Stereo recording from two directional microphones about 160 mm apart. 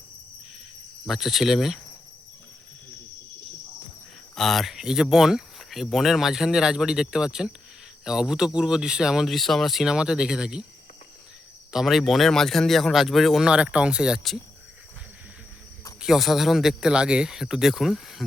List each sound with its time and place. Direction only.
1.0 s speech: centre (ahead or behind)
4.4 s speech: centre (ahead or behind)
11.7 s speech: centre (ahead or behind)
16.0 s speech: centre (ahead or behind)